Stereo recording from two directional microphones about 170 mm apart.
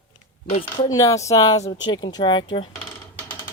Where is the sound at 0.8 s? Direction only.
20° left (ahead or behind).